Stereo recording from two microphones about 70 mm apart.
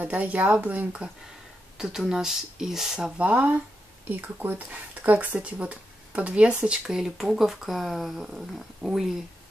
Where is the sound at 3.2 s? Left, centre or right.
Centre.